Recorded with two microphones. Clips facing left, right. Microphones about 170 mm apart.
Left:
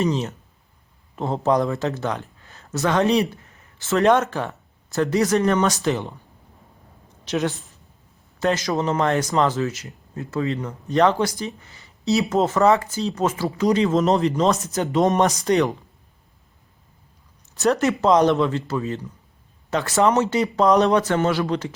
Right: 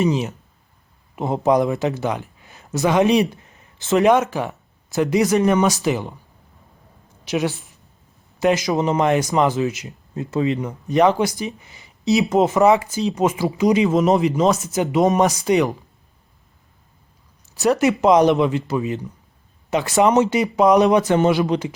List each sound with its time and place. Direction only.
0.0 s a man's voice: 10° right (ahead or behind)
7.3 s speech: 10° right (ahead or behind)
13.8 s speech: 5° right (ahead or behind)
17.5 s speech: 10° right (ahead or behind)